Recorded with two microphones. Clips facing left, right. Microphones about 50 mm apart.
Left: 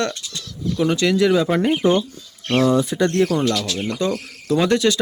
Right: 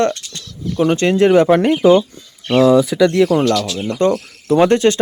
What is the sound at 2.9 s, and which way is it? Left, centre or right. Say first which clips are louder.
Speech: right 5 dB; right.